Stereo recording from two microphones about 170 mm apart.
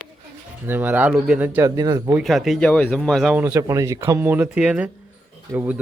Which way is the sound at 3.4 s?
20° right (ahead or behind).